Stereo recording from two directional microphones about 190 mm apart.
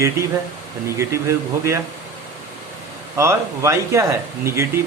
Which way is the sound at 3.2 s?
15° right (ahead or behind).